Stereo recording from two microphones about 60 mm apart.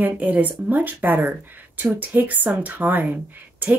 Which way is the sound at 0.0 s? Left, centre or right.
Right.